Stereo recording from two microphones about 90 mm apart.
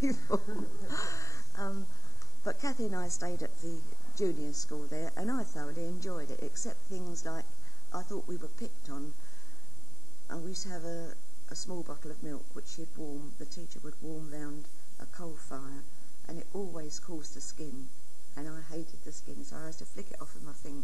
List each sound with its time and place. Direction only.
0.0 s a sound: 40° left (ahead or behind)
2.4 s speech: 35° left (ahead or behind)
10.2 s speech: 35° left (ahead or behind)